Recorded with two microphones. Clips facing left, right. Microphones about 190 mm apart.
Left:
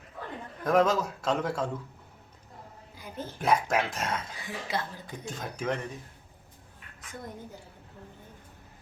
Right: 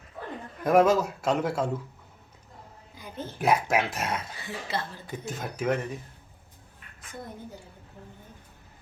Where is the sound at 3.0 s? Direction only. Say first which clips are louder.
Right 1 dB; 10° left (ahead or behind).